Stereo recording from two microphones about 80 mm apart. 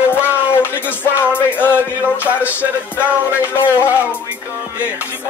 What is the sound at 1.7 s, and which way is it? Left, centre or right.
Music, centre.